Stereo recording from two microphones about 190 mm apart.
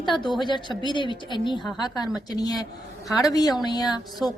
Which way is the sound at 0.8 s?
25° left (ahead or behind).